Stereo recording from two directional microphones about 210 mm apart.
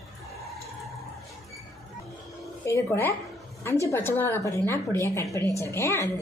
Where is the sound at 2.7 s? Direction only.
10° left (ahead or behind).